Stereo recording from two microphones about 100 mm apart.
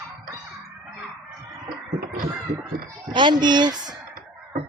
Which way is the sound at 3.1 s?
50° right (ahead or behind).